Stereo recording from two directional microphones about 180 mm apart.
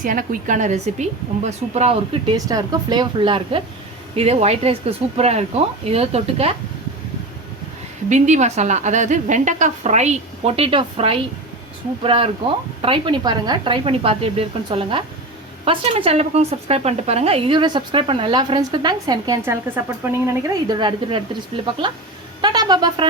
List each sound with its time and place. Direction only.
0.0 s a woman's voice: 50° right (ahead or behind); by 6.5 s 35° right (ahead or behind)
8.1 s a woman's voice: 40° right (ahead or behind); by 23.0 s 20° right (ahead or behind)